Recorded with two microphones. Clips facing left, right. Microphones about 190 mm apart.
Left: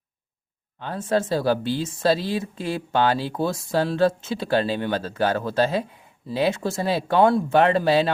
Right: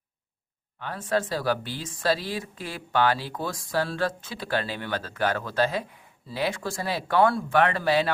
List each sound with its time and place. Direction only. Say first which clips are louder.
0.8 s speech: left 4 dB; 25° left (ahead or behind)